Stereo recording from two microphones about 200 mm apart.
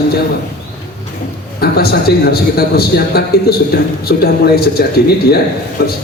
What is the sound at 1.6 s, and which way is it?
A man's voice, 50° left (ahead or behind).